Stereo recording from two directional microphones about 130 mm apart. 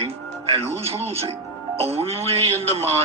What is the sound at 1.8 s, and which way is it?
Speech, 50° right (ahead or behind).